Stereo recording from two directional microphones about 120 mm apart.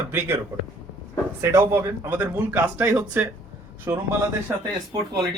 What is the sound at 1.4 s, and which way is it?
Speech, 25° right (ahead or behind).